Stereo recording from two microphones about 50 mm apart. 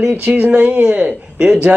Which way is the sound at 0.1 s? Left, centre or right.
Right.